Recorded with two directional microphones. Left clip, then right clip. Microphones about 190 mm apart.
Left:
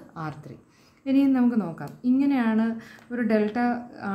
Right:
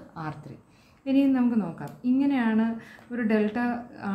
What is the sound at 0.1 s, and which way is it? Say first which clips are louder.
A woman's voice: left 1 dB; 20° left (ahead or behind).